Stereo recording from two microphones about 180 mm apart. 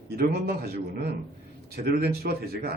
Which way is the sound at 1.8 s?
60° right (ahead or behind).